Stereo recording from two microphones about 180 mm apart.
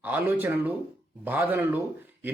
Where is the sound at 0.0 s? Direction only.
10° right (ahead or behind).